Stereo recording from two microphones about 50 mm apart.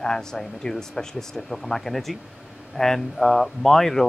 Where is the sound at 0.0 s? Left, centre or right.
Centre.